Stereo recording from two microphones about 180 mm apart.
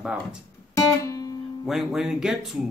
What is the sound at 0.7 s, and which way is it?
Music, 20° left (ahead or behind).